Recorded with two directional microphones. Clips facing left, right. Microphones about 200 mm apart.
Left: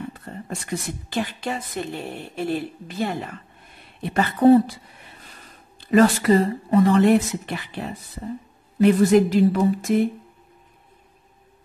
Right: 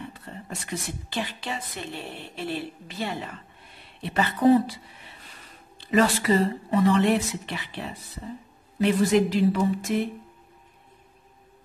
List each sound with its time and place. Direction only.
0.1 s speech: 45° left (ahead or behind)
5.8 s speech: 50° left (ahead or behind)
8.8 s speech: 45° left (ahead or behind)